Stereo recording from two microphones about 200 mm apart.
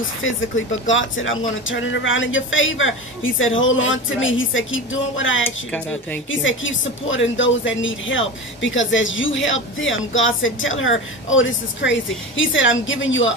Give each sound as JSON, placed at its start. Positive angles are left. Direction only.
{"t": 0.2, "sound": "a woman's voice", "side_deg": 75}